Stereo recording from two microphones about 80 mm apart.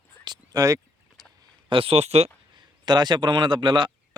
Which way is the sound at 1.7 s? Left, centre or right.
Right.